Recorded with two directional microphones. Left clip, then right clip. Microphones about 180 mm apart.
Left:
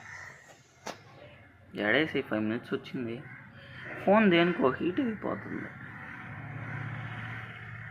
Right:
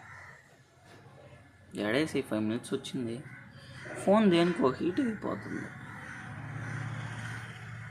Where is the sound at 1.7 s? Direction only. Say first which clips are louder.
Left 3 dB; 25° right (ahead or behind).